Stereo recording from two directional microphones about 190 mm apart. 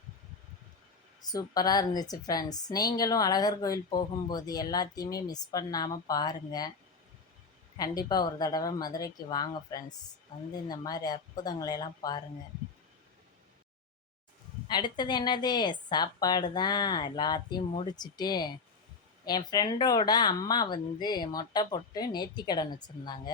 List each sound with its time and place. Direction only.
1.2 s a woman's voice: 20° left (ahead or behind)
7.8 s a woman's voice: 20° left (ahead or behind)
14.7 s a woman's voice: 25° left (ahead or behind)